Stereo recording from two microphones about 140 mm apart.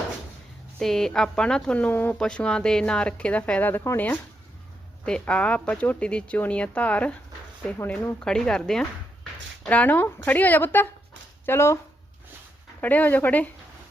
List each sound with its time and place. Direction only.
0.8 s speech: 5° left (ahead or behind); by 11.8 s 20° left (ahead or behind)
12.8 s speech: 10° left (ahead or behind)